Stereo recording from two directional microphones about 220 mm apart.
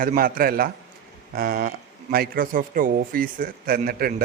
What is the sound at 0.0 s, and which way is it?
Speech, 40° right (ahead or behind).